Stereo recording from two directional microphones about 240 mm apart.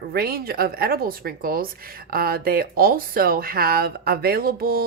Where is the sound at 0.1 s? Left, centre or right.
Right.